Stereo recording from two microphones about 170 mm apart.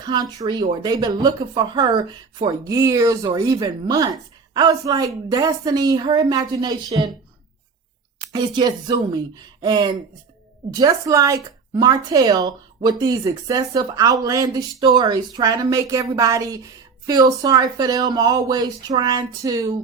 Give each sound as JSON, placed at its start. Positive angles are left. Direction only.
{"t": 0.0, "sound": "speech", "side_deg": -25}
{"t": 8.3, "sound": "speech", "side_deg": -25}